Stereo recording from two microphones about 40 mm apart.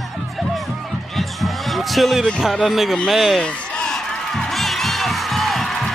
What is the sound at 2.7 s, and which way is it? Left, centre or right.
Speech, centre.